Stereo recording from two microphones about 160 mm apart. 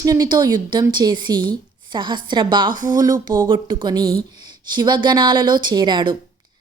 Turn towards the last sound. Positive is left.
turn(degrees=-30)  # may be behind; listen again after turning